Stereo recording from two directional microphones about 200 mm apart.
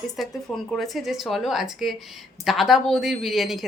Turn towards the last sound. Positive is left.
turn(degrees=0)  # may be behind; listen again after turning